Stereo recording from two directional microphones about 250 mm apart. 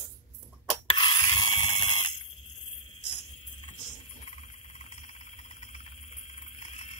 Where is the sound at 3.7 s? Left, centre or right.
Left.